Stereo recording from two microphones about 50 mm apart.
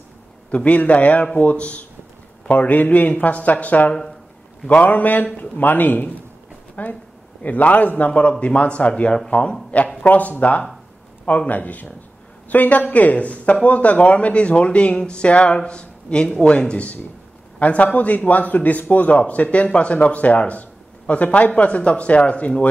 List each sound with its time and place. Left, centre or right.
0.5 s a man's voice: left